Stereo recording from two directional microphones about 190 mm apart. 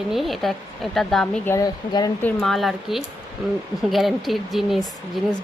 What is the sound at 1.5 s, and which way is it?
Speech, 20° left (ahead or behind).